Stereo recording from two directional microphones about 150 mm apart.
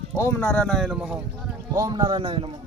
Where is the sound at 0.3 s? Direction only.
10° left (ahead or behind); by 1.5 s 5° right (ahead or behind).